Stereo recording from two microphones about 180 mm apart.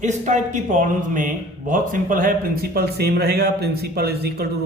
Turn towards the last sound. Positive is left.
turn(degrees=-60)  # may be behind; listen again after turning